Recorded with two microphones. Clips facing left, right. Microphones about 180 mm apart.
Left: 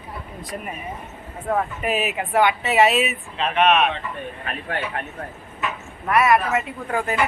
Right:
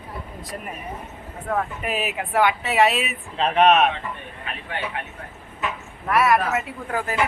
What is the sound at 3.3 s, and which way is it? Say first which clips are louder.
Speech: right 2 dB; 35° right (ahead or behind).